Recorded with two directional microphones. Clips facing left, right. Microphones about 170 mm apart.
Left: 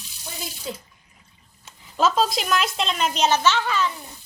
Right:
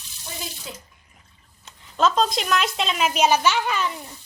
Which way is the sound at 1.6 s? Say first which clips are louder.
Even; 5° left (ahead or behind).